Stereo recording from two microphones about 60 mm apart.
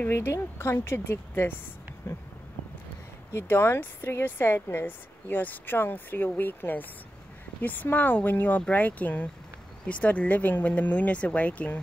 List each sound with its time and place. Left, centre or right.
0.6 s a woman's voice: left
3.4 s speech: left